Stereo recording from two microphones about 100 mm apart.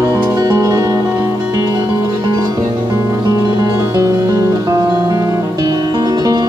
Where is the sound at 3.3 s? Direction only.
40° right (ahead or behind).